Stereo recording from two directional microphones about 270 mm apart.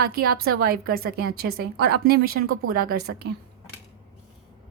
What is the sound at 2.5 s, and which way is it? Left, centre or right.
Speech, right.